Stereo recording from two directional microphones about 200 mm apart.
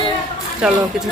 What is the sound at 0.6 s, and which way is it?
Speech, 5° right (ahead or behind).